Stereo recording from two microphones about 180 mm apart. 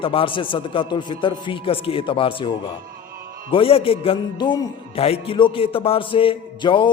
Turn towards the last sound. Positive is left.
turn(degrees=30)  # may be behind; listen again after turning